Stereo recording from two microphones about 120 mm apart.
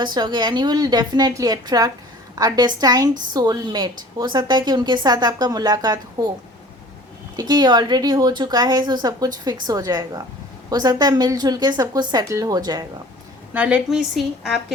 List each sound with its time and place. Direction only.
0.0 s a woman's voice: 40° right (ahead or behind)
7.3 s a woman's voice: 35° right (ahead or behind)
13.5 s a woman's voice: 10° right (ahead or behind)